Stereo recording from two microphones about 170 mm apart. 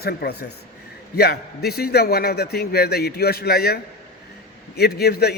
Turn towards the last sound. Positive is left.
turn(degrees=70)  # may be behind; listen again after turning